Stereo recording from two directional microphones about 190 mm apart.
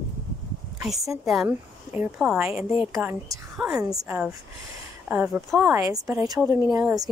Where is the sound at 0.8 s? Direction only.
Centre (ahead or behind).